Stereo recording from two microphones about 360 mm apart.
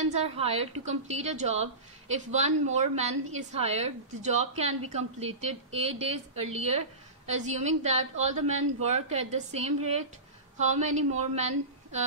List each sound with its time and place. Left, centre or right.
0.0 s a woman's voice: centre